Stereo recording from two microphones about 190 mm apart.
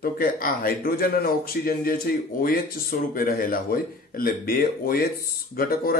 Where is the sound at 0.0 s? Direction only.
50° left (ahead or behind).